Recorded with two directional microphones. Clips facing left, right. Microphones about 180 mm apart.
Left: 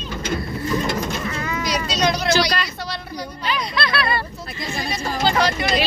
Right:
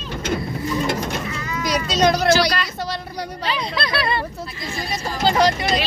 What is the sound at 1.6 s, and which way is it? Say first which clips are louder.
Speech: right 4 dB; 50° right (ahead or behind).